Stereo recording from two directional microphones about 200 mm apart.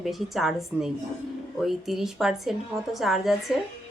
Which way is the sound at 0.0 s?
Centre (ahead or behind).